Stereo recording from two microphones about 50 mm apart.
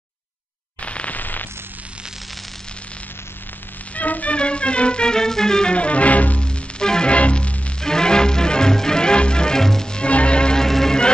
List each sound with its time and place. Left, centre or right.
0.8 s a sound: left
3.9 s music: left
6.4 s music: centre
7.8 s music: centre